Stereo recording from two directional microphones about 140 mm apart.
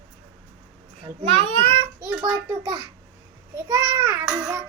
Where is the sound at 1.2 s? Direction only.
45° right (ahead or behind).